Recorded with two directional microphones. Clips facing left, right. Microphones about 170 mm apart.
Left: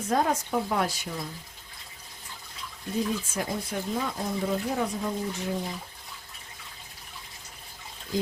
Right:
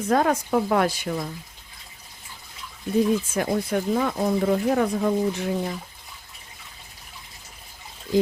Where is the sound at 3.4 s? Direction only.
65° right (ahead or behind).